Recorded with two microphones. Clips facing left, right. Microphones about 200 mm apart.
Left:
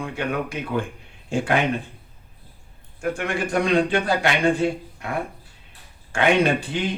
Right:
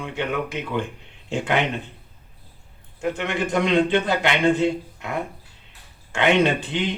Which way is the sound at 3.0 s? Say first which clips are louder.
Even; 20° right (ahead or behind).